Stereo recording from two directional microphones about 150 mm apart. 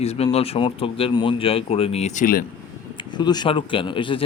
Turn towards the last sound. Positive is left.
turn(degrees=35)  # may be behind; listen again after turning